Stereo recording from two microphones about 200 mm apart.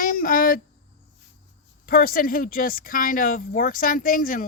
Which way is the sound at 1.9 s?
45° left (ahead or behind).